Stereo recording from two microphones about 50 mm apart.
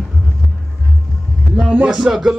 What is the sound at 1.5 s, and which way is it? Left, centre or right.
Music, centre.